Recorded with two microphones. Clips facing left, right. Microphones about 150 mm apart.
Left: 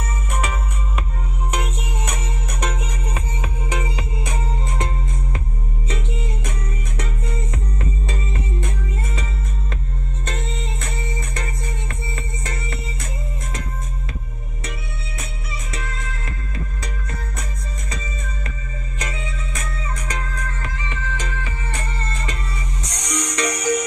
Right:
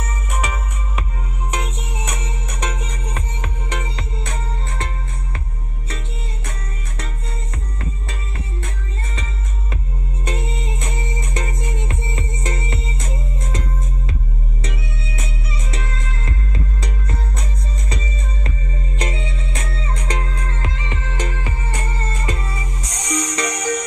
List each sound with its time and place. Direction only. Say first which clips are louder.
0.0 s music: even; centre (ahead or behind)
8.1 s music: left 4 dB; 15° left (ahead or behind)
10.2 s music: right 3 dB; 15° right (ahead or behind)
18.9 s music: right 4 dB; 30° right (ahead or behind)
20.9 s music: right 2 dB; 55° right (ahead or behind)
23.0 s music: right 1 dB; centre (ahead or behind)